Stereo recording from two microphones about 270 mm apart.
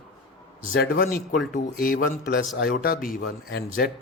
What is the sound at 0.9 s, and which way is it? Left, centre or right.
Speech, left.